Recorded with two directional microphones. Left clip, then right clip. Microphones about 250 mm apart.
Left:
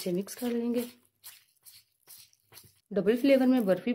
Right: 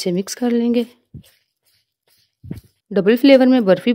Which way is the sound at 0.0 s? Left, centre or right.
Right.